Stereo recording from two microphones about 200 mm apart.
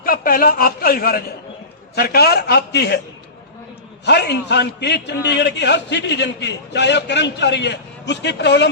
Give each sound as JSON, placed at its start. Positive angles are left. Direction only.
{"t": 0.0, "sound": "a man's voice", "side_deg": 45}
{"t": 4.0, "sound": "a man's voice", "side_deg": 55}